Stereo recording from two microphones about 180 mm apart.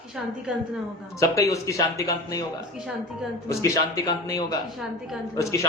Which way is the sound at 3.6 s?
20° left (ahead or behind).